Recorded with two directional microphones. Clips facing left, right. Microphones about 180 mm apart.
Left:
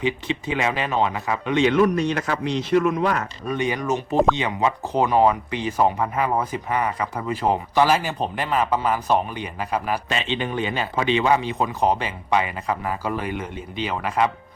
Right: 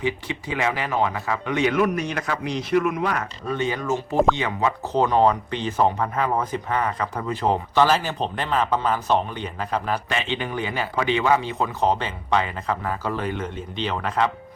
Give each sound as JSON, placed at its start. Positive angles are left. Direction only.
{"t": 0.0, "sound": "speech", "side_deg": 20}
{"t": 3.5, "sound": "speech", "side_deg": 15}